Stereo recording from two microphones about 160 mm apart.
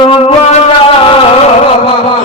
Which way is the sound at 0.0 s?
35° left (ahead or behind).